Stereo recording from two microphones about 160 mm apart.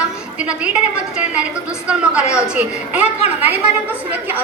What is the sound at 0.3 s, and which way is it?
A woman's voice, 5° right (ahead or behind).